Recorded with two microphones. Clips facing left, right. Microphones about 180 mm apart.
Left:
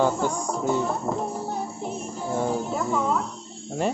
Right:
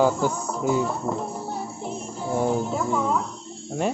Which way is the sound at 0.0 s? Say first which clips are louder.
Right 2 dB; 10° right (ahead or behind).